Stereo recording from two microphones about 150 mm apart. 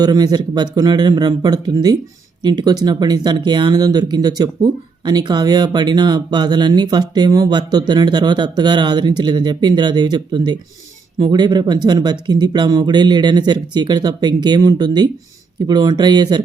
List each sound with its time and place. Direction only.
0.0 s speech: 25° right (ahead or behind)